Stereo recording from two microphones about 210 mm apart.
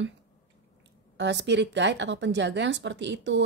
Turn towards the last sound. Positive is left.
turn(degrees=-60)  # may be behind; listen again after turning